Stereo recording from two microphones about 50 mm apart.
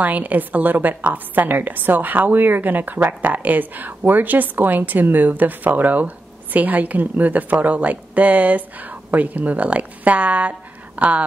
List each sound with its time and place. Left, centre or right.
0.0 s a woman's voice: right